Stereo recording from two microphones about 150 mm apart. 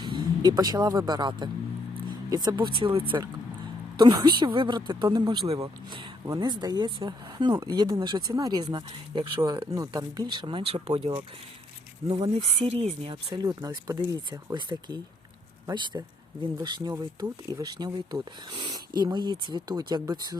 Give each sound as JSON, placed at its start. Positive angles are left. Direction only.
{"t": 0.0, "sound": "speech", "side_deg": -30}
{"t": 12.5, "sound": "speech", "side_deg": -45}
{"t": 13.1, "sound": "speech", "side_deg": -30}